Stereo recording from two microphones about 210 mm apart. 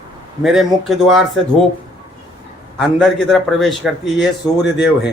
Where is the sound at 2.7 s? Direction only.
Centre (ahead or behind).